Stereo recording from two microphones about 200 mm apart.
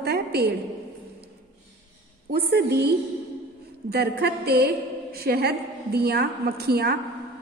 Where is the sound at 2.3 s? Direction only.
50° right (ahead or behind).